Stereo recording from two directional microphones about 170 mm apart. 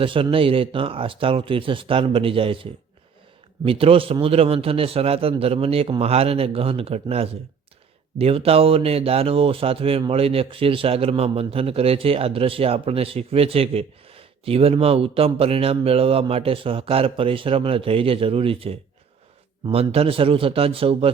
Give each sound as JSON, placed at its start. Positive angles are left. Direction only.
{"t": 0.0, "sound": "speech", "side_deg": -30}